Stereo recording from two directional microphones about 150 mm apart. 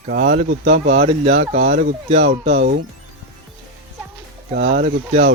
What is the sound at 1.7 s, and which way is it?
Speech, 65° right (ahead or behind).